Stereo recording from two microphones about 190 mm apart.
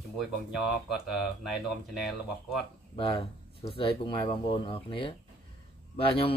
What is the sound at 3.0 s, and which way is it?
Speech, 30° left (ahead or behind).